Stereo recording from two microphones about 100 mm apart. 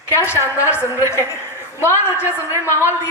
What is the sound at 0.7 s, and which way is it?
Speech, 25° left (ahead or behind).